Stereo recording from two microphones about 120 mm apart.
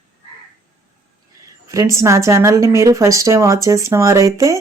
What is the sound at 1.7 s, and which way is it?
Speech, 25° right (ahead or behind).